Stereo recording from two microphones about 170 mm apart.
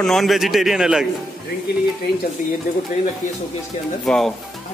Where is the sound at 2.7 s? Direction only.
50° left (ahead or behind).